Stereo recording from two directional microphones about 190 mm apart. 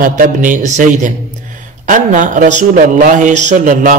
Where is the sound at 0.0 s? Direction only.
45° right (ahead or behind).